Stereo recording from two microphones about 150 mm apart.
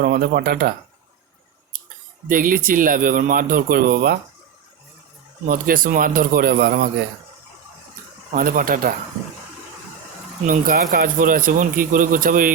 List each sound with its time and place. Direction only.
0.0 s speech: 90° right
2.2 s speech: 65° right (ahead or behind); by 4.2 s 90° right
5.5 s speech: 70° right (ahead or behind); by 6.8 s 90° right
8.3 s speech: 65° right (ahead or behind)
10.4 s speech: 65° right (ahead or behind)